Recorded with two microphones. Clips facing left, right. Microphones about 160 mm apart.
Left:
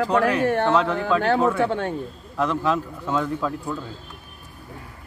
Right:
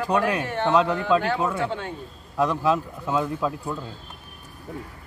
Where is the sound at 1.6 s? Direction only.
60° left (ahead or behind).